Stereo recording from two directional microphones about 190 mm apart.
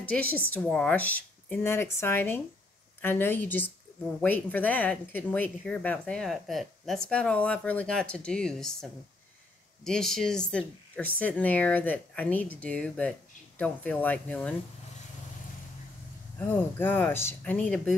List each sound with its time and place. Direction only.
0.0 s speech: 10° left (ahead or behind)
9.8 s speech: centre (ahead or behind)
16.3 s speech: 10° left (ahead or behind)